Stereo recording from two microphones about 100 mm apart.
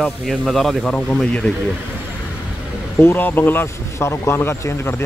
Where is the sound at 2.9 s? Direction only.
20° left (ahead or behind).